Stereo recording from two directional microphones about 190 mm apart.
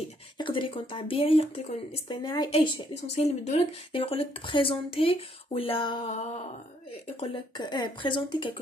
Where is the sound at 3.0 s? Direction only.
35° left (ahead or behind).